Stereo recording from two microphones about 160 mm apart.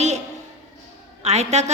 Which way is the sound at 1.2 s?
40° right (ahead or behind).